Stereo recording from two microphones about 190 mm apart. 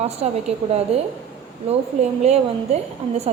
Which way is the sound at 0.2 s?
35° right (ahead or behind).